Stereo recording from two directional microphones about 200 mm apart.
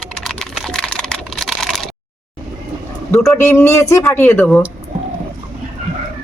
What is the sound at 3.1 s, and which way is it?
Speech, 10° left (ahead or behind).